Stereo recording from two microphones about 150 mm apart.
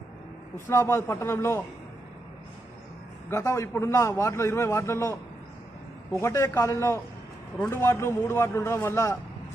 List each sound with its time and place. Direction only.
0.5 s a man's voice: 20° left (ahead or behind)
3.2 s a man's voice: 20° left (ahead or behind)